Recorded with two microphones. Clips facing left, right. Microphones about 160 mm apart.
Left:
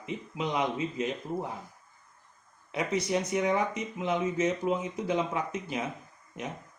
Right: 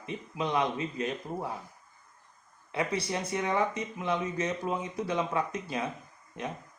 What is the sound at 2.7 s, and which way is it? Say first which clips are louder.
Speech: left 2 dB; 20° left (ahead or behind).